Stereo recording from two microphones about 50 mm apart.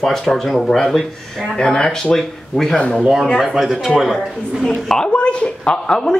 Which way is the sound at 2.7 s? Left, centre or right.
Left.